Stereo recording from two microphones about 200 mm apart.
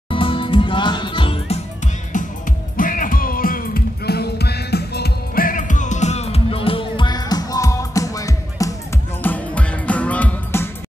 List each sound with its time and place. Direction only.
0.1 s music: 25° left (ahead or behind)
2.1 s music: 40° left (ahead or behind); by 10.7 s 10° left (ahead or behind)